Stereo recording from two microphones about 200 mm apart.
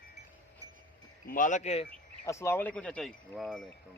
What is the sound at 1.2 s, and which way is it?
Speech, 40° left (ahead or behind).